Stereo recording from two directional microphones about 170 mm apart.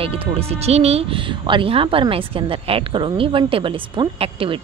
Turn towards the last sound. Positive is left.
turn(degrees=-30)  # may be behind; listen again after turning